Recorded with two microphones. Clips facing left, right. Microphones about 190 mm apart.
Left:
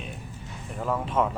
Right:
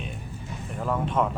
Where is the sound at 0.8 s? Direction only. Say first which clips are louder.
Even; centre (ahead or behind).